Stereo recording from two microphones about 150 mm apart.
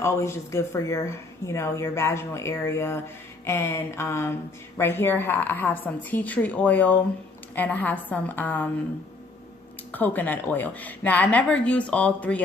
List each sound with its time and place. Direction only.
0.0 s a woman's voice: 20° left (ahead or behind)
9.9 s a woman's voice: 10° left (ahead or behind)